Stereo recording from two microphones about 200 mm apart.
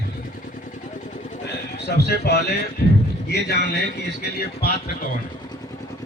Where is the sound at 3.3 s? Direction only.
55° left (ahead or behind).